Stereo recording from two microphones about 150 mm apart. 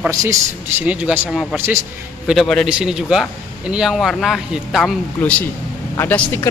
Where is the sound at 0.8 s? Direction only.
10° right (ahead or behind).